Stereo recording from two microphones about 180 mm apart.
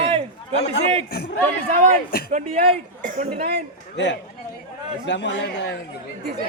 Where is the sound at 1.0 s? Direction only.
60° left (ahead or behind).